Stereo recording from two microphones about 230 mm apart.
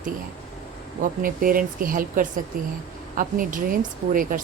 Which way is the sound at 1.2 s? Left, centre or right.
Right.